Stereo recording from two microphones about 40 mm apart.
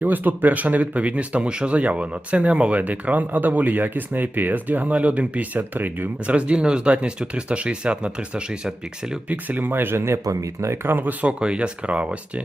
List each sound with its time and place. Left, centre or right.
0.0 s speech: right
1.4 s speech: right
2.7 s speech: right
4.9 s speech: right
5.5 s speech: right
6.2 s speech: right
9.3 s speech: right
10.7 s speech: right
11.3 s speech: right